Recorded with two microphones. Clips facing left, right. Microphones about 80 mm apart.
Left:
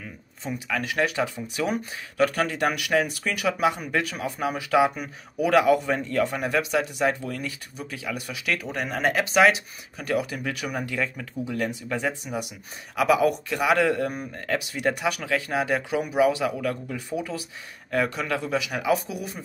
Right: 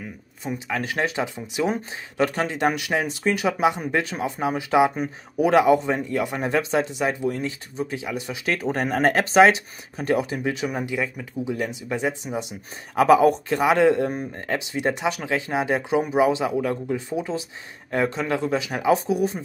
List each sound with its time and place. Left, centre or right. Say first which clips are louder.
0.7 s speech: even; right; by 6.3 s centre
6.3 s speech: right 2 dB; right